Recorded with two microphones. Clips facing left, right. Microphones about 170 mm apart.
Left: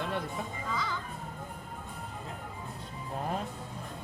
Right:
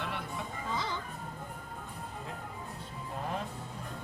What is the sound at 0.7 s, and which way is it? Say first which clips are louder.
Music: even; 25° right (ahead or behind).